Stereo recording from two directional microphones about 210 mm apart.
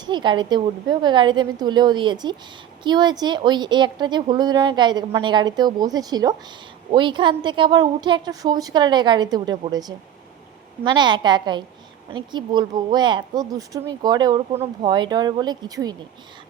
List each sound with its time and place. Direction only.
0.0 s speech: 20° right (ahead or behind)